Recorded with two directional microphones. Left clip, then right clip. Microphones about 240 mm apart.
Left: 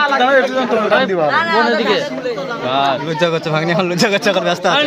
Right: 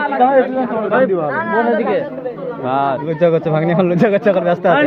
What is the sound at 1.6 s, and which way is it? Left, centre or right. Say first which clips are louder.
Speech: left 1 dB; centre.